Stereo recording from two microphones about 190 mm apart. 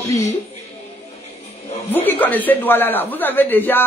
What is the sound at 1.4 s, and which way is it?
Music, 35° left (ahead or behind).